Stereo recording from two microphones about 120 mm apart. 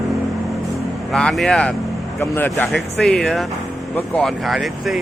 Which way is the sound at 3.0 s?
5° left (ahead or behind).